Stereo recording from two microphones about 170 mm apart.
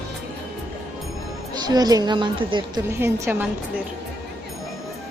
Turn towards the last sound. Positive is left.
turn(degrees=-10)  # may be behind; listen again after turning